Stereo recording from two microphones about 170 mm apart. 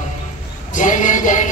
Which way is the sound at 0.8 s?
50° left (ahead or behind).